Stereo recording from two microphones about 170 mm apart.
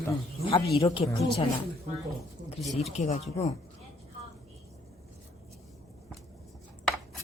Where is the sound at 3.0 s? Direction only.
45° left (ahead or behind).